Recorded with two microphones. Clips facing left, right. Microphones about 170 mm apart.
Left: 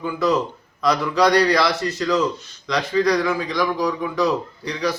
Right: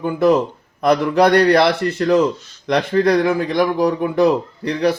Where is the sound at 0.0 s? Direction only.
50° right (ahead or behind).